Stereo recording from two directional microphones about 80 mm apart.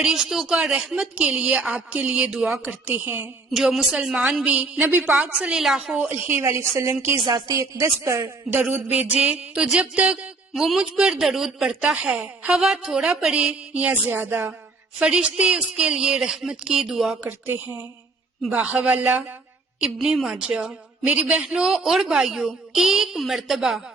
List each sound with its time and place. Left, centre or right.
0.0 s a woman's voice: centre
2.8 s a woman's voice: right
3.5 s a man's voice: centre
6.1 s speech: right
7.3 s speech: right
8.5 s a woman's voice: centre
14.9 s a woman's voice: centre
17.2 s a woman's voice: right; by 23.8 s centre